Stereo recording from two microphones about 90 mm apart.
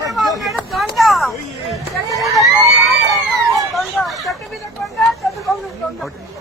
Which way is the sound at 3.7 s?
Centre (ahead or behind).